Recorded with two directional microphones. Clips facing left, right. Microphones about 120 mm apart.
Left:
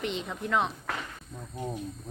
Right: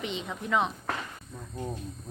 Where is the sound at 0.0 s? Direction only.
Centre (ahead or behind).